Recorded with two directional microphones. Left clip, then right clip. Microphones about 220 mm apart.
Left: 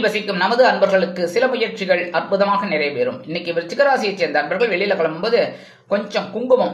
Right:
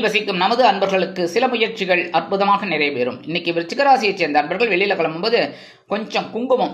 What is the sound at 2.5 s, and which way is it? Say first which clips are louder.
Speech: right 1 dB; 35° right (ahead or behind).